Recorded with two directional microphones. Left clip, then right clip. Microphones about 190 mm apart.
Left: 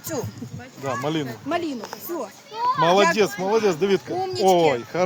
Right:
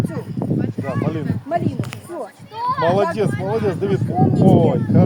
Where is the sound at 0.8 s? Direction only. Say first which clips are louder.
Left 4 dB; 50° left (ahead or behind).